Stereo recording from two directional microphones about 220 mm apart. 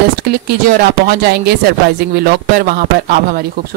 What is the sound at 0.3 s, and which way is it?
Speech, 45° right (ahead or behind).